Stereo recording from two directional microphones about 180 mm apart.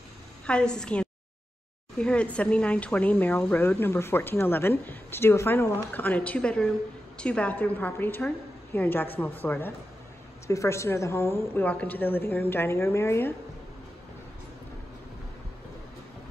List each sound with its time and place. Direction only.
0.5 s a woman's voice: 5° left (ahead or behind)